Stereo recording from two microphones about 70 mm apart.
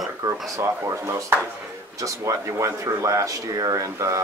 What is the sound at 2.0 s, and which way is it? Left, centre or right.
Speech, right.